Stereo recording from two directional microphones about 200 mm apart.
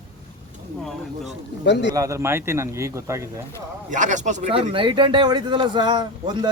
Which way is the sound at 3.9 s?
40° right (ahead or behind).